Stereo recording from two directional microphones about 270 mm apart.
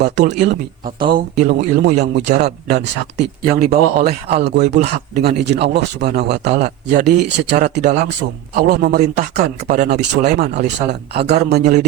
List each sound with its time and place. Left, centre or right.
0.9 s speech: centre
1.5 s speech: right
3.4 s speech: right
3.7 s speech: right
6.5 s speech: right